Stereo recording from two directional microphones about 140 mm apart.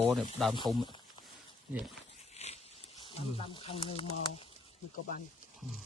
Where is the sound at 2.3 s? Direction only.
50° left (ahead or behind).